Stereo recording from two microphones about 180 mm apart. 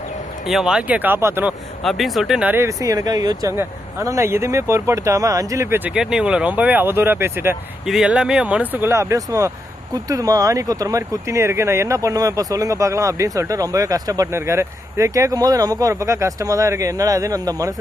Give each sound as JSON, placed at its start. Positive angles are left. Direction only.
{"t": 0.4, "sound": "speech", "side_deg": 0}
{"t": 1.8, "sound": "speech", "side_deg": 0}